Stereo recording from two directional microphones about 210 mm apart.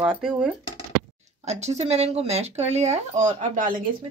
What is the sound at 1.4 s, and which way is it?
Speech, 30° right (ahead or behind).